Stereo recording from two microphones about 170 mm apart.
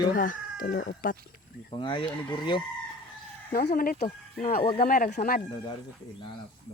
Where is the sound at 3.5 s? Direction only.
65° left (ahead or behind).